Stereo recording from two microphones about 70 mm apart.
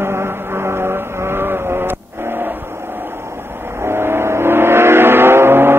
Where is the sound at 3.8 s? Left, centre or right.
Right.